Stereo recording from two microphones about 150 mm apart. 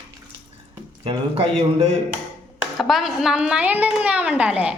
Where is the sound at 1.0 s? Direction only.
40° right (ahead or behind).